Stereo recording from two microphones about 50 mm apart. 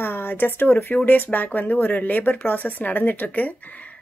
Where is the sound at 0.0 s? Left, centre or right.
Left.